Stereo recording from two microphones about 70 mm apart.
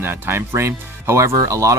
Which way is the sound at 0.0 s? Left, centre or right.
Right.